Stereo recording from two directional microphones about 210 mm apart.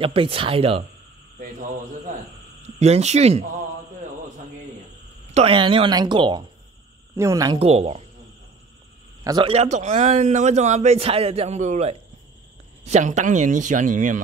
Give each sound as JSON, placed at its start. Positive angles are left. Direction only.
{"t": 0.0, "sound": "speech", "side_deg": -25}
{"t": 1.4, "sound": "a man's voice", "side_deg": -40}
{"t": 5.3, "sound": "a woman's voice", "side_deg": -25}
{"t": 7.5, "sound": "speech", "side_deg": -30}
{"t": 9.2, "sound": "a man's voice", "side_deg": -20}